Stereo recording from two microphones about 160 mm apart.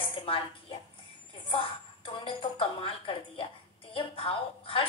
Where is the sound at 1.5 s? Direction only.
35° left (ahead or behind).